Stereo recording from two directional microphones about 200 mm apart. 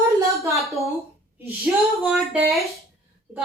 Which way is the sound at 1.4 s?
10° right (ahead or behind).